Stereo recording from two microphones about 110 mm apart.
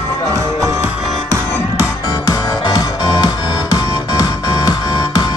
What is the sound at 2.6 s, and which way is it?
Music, 35° left (ahead or behind).